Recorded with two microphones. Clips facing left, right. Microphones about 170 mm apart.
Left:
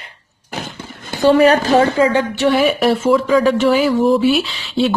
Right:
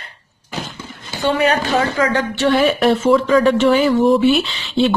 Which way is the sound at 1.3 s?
35° left (ahead or behind).